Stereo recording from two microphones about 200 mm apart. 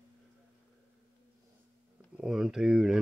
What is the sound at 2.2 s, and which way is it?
Speech, 5° right (ahead or behind).